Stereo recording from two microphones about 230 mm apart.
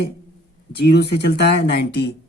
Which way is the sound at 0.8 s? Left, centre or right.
Left.